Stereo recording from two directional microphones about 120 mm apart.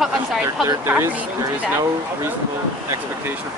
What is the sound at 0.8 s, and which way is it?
Speech, 15° right (ahead or behind).